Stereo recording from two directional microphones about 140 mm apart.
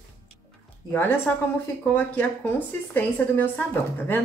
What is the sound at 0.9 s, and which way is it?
A woman's voice, 15° left (ahead or behind).